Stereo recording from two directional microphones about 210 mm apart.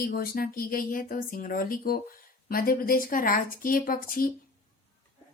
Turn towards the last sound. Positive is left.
turn(degrees=45)  # may be behind; listen again after turning